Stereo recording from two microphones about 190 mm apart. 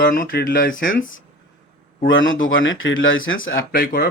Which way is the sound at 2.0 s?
90° left.